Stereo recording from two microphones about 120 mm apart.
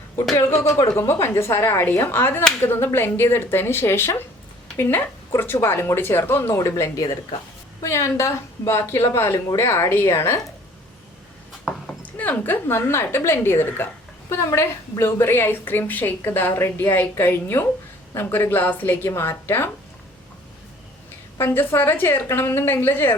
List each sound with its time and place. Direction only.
0.3 s speech: 20° left (ahead or behind)
12.1 s a woman's voice: 15° left (ahead or behind)
21.3 s a woman's voice: 20° left (ahead or behind)